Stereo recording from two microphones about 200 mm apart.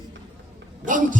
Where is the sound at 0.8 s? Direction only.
40° right (ahead or behind).